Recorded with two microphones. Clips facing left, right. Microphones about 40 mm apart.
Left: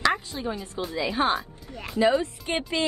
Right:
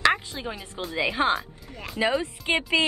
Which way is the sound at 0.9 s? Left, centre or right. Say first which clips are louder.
Right 1 dB; right.